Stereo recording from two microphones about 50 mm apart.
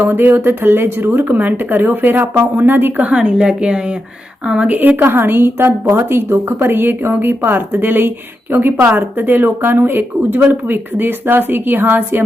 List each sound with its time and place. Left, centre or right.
0.0 s speech: right
3.1 s a woman's voice: right
4.7 s a woman's voice: right
5.0 s speech: right